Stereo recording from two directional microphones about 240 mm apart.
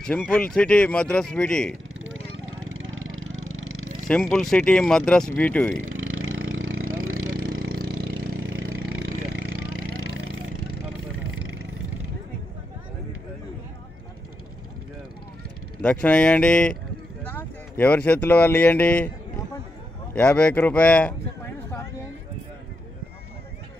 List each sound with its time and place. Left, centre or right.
0.0 s speech: centre
2.0 s vehicle: right
4.1 s speech: centre
5.9 s vehicle: right
9.3 s a sound: right
9.7 s vehicle: right
15.8 s speech: centre